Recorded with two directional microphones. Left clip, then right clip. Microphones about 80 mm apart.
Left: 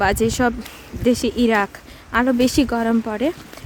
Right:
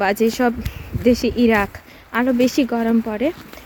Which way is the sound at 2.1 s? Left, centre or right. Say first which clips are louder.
Even; centre.